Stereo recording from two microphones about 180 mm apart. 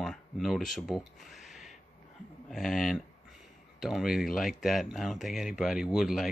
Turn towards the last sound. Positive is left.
turn(degrees=0)  # may be behind; listen again after turning